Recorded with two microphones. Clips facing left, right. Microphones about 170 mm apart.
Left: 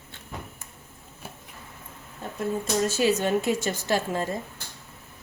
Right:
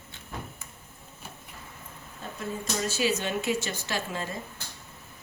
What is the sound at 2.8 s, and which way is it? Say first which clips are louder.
A woman's voice: left 4 dB; 50° left (ahead or behind).